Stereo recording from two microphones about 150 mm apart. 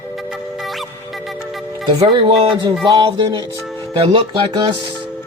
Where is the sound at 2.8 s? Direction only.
30° right (ahead or behind).